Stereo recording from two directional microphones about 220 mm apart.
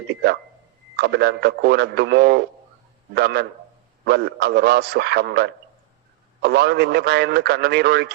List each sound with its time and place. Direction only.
0.1 s a man's voice: 50° right (ahead or behind)